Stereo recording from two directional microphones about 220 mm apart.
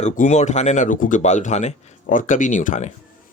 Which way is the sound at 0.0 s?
30° left (ahead or behind).